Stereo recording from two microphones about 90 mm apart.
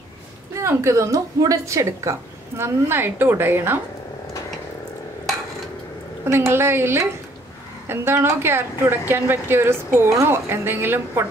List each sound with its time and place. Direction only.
0.6 s a woman's voice: 30° right (ahead or behind)
6.2 s a woman's voice: 30° right (ahead or behind)